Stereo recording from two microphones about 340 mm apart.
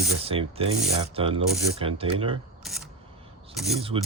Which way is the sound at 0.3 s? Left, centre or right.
Centre.